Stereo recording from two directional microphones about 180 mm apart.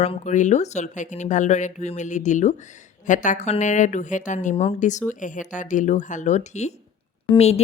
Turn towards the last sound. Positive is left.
turn(degrees=35)  # may be behind; listen again after turning